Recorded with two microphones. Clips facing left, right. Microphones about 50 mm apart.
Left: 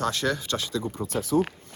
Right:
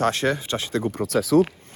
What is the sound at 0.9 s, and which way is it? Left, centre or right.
Speech, right.